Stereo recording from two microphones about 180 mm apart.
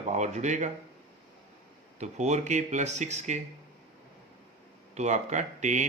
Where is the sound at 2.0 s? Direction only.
40° right (ahead or behind).